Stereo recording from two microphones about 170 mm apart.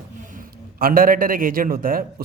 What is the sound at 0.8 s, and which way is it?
A man's voice, 60° right (ahead or behind).